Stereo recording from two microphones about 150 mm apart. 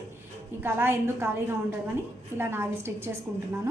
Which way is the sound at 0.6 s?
15° right (ahead or behind).